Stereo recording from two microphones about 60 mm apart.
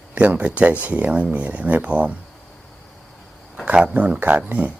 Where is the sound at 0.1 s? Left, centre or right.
Right.